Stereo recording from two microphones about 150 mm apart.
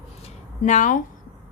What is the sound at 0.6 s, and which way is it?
Speech, 55° left (ahead or behind).